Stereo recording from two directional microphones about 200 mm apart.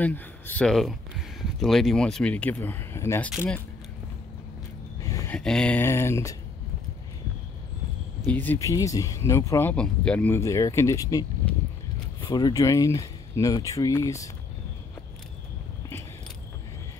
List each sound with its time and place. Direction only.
0.0 s speech: 10° left (ahead or behind)
5.0 s a sound: 15° left (ahead or behind)
5.3 s speech: 5° left (ahead or behind)
8.3 s speech: 10° left (ahead or behind)